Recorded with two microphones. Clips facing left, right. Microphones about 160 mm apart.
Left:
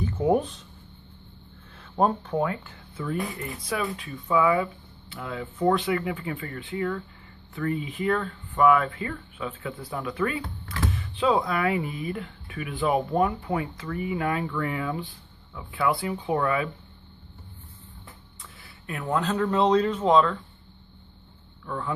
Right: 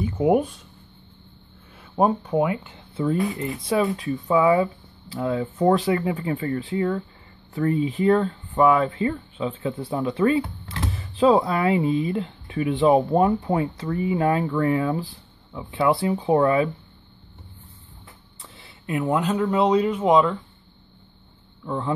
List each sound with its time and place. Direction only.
0.0 s speech: 15° right (ahead or behind)
1.8 s speech: 10° right (ahead or behind); by 16.7 s 30° right (ahead or behind)
18.4 s speech: 25° right (ahead or behind)
21.6 s speech: 25° right (ahead or behind)